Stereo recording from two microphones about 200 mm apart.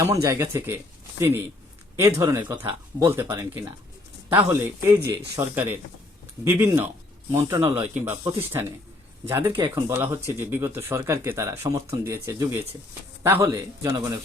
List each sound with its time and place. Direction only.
0.0 s speech: 15° right (ahead or behind)
2.0 s speech: 15° right (ahead or behind)
9.5 s speech: 25° right (ahead or behind)
9.7 s speech: 10° right (ahead or behind)